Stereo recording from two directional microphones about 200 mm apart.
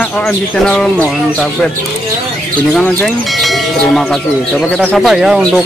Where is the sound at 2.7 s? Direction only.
Centre (ahead or behind).